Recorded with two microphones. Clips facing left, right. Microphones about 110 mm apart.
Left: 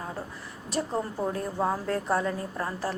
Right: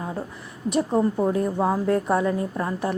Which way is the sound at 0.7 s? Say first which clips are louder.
Right 8 dB; 20° right (ahead or behind).